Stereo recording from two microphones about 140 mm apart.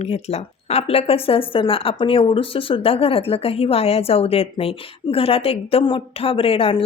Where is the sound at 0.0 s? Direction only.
45° left (ahead or behind).